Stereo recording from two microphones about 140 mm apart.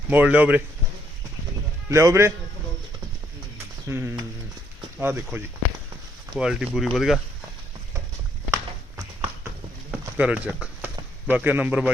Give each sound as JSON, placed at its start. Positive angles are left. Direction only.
{"t": 0.1, "sound": "speech", "side_deg": -10}
{"t": 1.9, "sound": "a man's voice", "side_deg": -20}
{"t": 3.8, "sound": "a man's voice", "side_deg": -20}
{"t": 6.3, "sound": "speech", "side_deg": -5}
{"t": 8.4, "sound": "horse", "side_deg": -20}
{"t": 9.9, "sound": "clip-clop", "side_deg": -5}
{"t": 11.3, "sound": "speech", "side_deg": -10}